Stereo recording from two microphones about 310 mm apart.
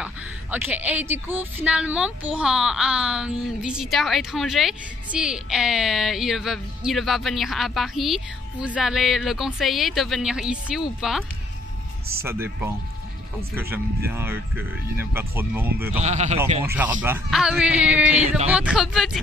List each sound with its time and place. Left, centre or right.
0.0 s a woman's voice: centre
16.0 s speech: right
16.6 s a woman's voice: centre